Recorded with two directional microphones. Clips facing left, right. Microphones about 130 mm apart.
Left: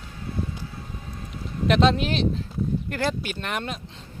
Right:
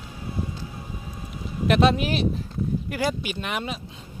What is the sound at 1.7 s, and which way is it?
Speech, 5° right (ahead or behind).